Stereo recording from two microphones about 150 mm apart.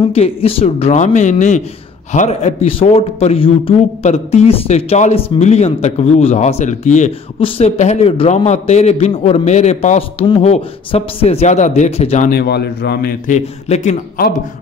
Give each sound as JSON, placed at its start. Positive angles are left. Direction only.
{"t": 0.1, "sound": "a man's voice", "side_deg": 40}
{"t": 2.1, "sound": "a man's voice", "side_deg": 45}
{"t": 12.3, "sound": "a man's voice", "side_deg": 90}
{"t": 13.3, "sound": "a man's voice", "side_deg": 50}